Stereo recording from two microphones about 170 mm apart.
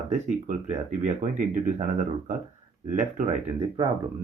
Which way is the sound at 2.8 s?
50° right (ahead or behind).